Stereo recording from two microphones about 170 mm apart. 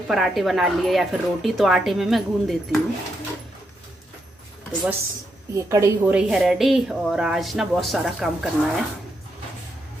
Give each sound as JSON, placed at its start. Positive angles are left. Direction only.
{"t": 0.1, "sound": "speech", "side_deg": 0}
{"t": 5.5, "sound": "a woman's voice", "side_deg": -20}
{"t": 6.1, "sound": "speech", "side_deg": -5}